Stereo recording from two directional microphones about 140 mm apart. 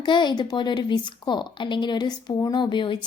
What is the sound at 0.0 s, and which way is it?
Speech, 30° left (ahead or behind).